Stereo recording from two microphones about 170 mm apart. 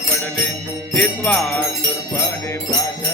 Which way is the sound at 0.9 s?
5° left (ahead or behind).